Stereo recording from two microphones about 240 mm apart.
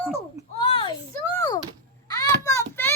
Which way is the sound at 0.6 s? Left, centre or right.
Left.